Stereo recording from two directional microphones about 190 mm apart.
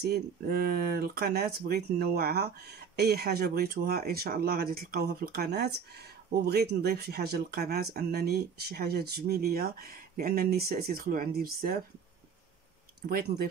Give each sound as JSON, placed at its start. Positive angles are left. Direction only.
{"t": 0.0, "sound": "speech", "side_deg": -55}